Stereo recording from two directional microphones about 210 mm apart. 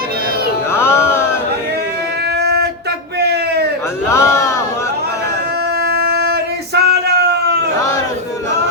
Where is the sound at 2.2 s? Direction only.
50° right (ahead or behind).